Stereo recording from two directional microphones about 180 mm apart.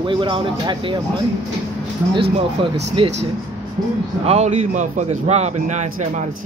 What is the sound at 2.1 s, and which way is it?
Speech, 30° right (ahead or behind).